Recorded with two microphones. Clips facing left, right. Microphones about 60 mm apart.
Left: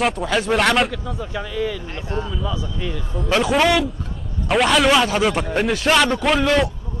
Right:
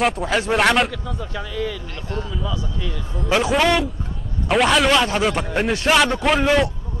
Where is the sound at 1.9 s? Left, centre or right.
Left.